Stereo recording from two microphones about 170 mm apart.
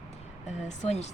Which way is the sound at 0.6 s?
40° left (ahead or behind).